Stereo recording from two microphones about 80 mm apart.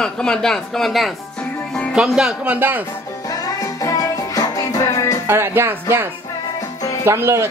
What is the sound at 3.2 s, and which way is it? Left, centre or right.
Music, left.